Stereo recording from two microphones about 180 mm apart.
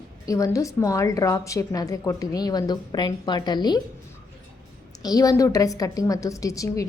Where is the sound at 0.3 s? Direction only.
20° left (ahead or behind).